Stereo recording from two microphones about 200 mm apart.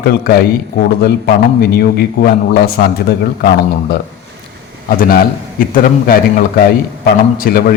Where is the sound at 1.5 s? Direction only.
50° left (ahead or behind).